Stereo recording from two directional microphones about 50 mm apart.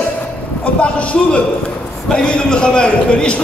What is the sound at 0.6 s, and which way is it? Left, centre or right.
A man's voice, left.